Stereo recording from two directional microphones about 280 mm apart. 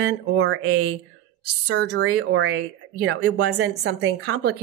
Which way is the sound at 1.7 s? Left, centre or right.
Right.